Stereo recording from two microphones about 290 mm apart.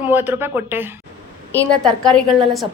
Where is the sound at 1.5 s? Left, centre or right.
Centre.